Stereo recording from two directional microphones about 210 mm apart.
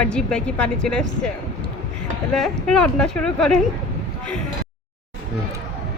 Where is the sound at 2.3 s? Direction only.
Centre (ahead or behind).